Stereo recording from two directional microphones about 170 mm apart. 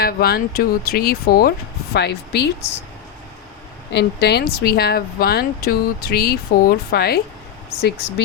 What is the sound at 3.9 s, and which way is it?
Speech, 80° left.